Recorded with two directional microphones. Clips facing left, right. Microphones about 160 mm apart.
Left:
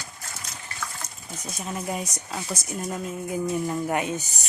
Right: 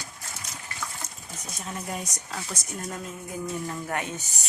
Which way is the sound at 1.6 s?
10° left (ahead or behind).